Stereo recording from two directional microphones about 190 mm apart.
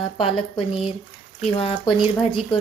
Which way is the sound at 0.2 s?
30° left (ahead or behind).